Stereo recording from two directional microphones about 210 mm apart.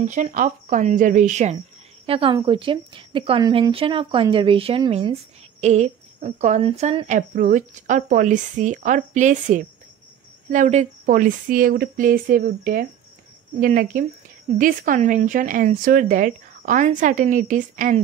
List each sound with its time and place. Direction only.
0.0 s speech: 35° right (ahead or behind)